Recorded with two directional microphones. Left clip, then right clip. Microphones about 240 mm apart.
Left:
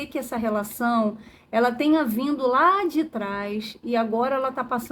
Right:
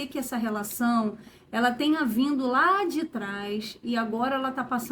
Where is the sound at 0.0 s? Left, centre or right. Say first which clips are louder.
Left 4 dB; left.